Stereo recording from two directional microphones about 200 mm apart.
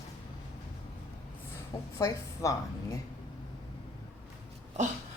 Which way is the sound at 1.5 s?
15° left (ahead or behind).